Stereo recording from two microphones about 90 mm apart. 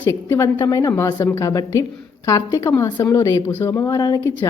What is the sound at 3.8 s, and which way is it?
Speech, 45° left (ahead or behind).